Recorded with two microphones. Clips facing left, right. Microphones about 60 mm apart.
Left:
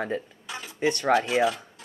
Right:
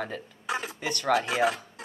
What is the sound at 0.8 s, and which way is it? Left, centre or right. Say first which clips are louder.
Speech: left 5 dB; left.